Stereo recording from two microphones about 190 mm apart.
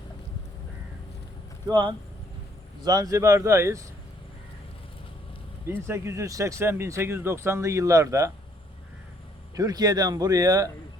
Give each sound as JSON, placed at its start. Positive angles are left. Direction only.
{"t": 1.6, "sound": "speech", "side_deg": -25}
{"t": 5.6, "sound": "speech", "side_deg": -15}
{"t": 9.6, "sound": "speech", "side_deg": -20}